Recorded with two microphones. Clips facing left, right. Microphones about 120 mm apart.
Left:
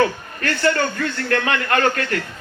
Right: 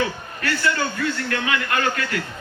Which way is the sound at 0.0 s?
50° left (ahead or behind).